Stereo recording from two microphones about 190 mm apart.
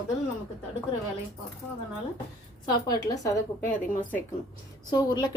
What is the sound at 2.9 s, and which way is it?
Speech, 20° left (ahead or behind).